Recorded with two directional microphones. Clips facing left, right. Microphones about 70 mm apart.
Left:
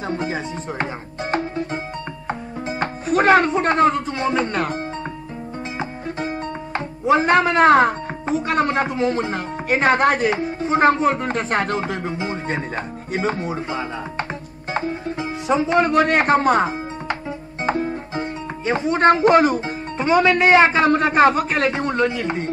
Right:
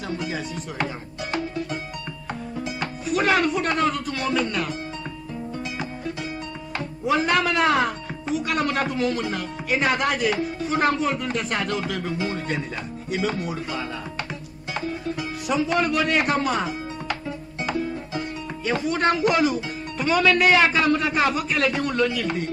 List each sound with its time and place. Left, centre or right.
0.1 s speech: left
1.3 s music: left
2.8 s speech: left
6.7 s speech: left
17.6 s music: left
18.7 s speech: left
20.0 s a man's voice: left